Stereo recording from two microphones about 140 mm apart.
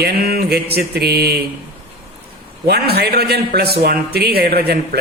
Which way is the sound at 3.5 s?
90° right.